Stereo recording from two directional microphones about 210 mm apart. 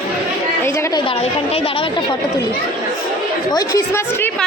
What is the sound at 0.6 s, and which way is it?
A woman's voice, 15° left (ahead or behind).